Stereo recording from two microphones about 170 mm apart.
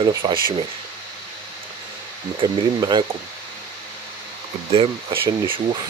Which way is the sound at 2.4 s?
25° right (ahead or behind).